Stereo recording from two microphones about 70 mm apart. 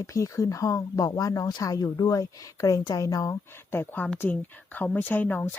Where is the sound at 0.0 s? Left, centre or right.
Left.